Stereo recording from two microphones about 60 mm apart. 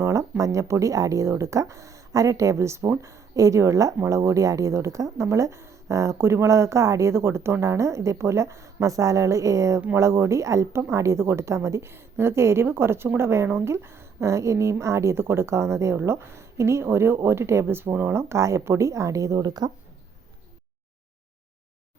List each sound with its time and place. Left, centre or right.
0.0 s a woman's voice: right
6.1 s a woman's voice: right
9.9 s a woman's voice: right
16.8 s a woman's voice: right
18.1 s a woman's voice: right